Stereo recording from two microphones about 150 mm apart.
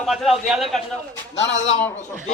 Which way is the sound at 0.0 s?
Centre (ahead or behind).